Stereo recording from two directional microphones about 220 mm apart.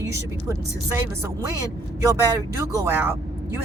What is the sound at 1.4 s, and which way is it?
Speech, 15° right (ahead or behind).